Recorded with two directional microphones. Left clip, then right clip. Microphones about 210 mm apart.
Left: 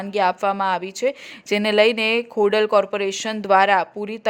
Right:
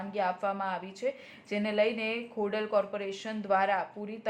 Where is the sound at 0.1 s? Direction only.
55° left (ahead or behind).